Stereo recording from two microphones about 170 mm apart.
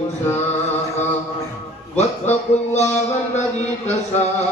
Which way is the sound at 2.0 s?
40° left (ahead or behind).